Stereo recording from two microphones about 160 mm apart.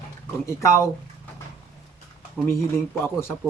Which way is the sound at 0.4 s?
20° left (ahead or behind).